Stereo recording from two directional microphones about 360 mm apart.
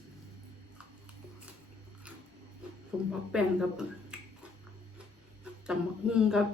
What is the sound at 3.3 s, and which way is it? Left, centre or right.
Speech, centre.